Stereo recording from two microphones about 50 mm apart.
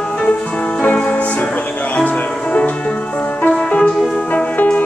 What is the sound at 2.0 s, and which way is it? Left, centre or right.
Music, left.